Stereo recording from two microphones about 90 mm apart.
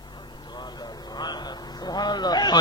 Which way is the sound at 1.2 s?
50° left (ahead or behind).